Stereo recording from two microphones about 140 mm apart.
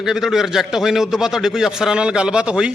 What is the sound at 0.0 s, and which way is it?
Speech, 5° right (ahead or behind).